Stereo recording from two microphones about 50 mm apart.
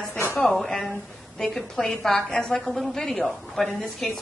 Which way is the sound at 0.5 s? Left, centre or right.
Centre.